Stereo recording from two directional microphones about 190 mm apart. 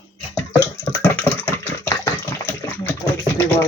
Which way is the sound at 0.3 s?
10° left (ahead or behind).